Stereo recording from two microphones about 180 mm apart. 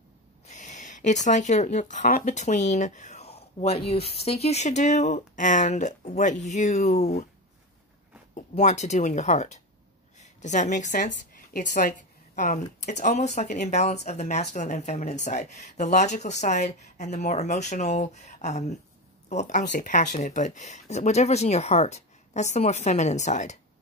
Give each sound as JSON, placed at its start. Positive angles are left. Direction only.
{"t": 0.5, "sound": "speech", "side_deg": 45}
{"t": 8.4, "sound": "a woman's voice", "side_deg": 40}